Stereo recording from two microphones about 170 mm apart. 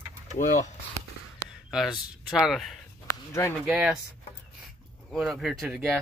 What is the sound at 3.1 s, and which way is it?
Speech, 15° left (ahead or behind).